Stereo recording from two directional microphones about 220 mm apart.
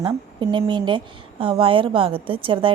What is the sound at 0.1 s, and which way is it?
Speech, 15° right (ahead or behind).